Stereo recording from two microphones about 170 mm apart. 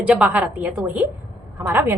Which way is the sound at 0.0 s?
5° right (ahead or behind).